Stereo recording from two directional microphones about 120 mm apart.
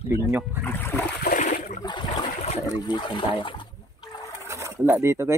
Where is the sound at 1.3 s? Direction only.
90° left.